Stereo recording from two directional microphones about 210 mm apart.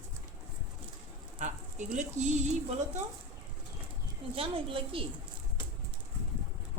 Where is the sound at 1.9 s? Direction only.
35° right (ahead or behind).